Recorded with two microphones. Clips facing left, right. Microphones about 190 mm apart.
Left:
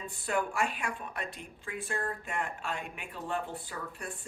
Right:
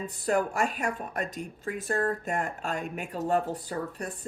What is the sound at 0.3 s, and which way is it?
Speech, 40° right (ahead or behind).